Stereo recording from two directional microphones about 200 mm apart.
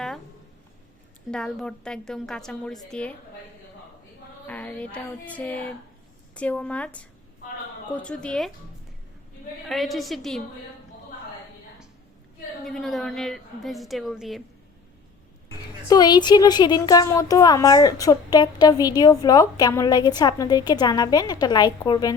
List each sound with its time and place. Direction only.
1.3 s a woman's voice: 5° left (ahead or behind)
4.4 s child singing: 5° left (ahead or behind)
7.9 s a woman's voice: 5° left (ahead or behind)
9.6 s a woman's voice: centre (ahead or behind)
12.6 s a woman's voice: centre (ahead or behind)
15.9 s speech: 20° left (ahead or behind)